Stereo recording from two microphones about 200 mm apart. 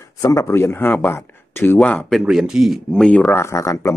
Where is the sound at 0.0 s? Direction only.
15° left (ahead or behind).